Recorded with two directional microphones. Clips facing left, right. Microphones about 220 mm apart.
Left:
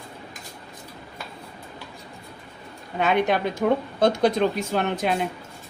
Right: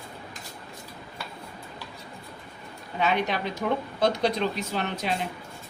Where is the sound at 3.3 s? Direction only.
50° left (ahead or behind).